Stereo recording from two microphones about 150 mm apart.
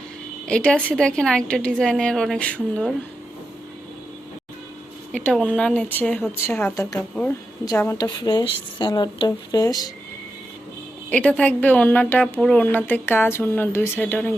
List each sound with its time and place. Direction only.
0.4 s a woman's voice: 5° left (ahead or behind)
5.1 s a woman's voice: 5° left (ahead or behind); by 9.8 s 25° left (ahead or behind)
11.1 s a woman's voice: 10° left (ahead or behind)